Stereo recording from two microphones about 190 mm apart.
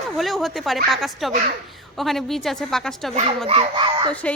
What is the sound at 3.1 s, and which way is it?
Speech, 35° right (ahead or behind).